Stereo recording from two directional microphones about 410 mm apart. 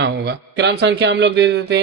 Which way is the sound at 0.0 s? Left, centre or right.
Right.